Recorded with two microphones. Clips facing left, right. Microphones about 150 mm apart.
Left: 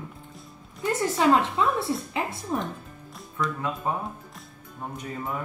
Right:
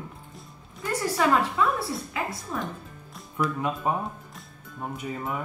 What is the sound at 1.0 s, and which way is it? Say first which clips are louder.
A woman's voice: left 2 dB; 20° left (ahead or behind).